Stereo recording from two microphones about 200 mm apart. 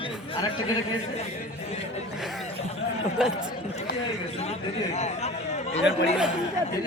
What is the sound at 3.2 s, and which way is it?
Speech, 5° right (ahead or behind).